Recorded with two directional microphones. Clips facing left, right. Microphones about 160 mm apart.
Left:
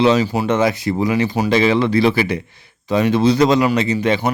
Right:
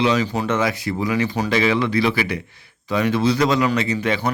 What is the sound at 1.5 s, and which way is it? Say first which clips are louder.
Speech: left 4 dB; 25° left (ahead or behind).